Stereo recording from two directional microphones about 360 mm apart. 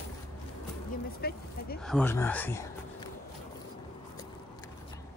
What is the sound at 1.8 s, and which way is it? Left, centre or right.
Speech, centre.